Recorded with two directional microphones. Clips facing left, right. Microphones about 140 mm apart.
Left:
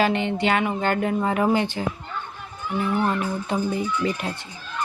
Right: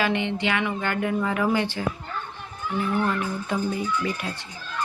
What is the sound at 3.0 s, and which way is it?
Speech, 25° left (ahead or behind).